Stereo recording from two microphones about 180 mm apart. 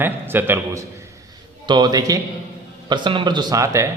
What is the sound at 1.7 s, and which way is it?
A man's voice, 25° right (ahead or behind).